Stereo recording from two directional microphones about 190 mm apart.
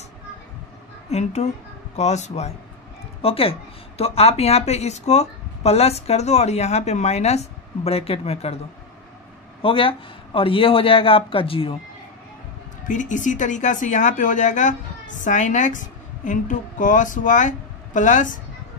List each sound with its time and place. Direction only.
1.1 s speech: 35° left (ahead or behind)
9.6 s a man's voice: 30° left (ahead or behind)
12.8 s speech: 40° left (ahead or behind)